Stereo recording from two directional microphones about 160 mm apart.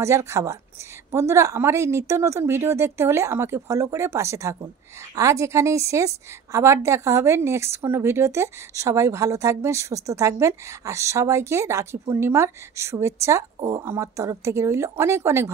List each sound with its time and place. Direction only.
0.0 s a woman's voice: 15° right (ahead or behind)